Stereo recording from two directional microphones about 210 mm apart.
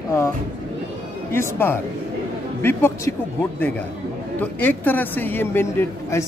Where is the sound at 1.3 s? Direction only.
10° left (ahead or behind).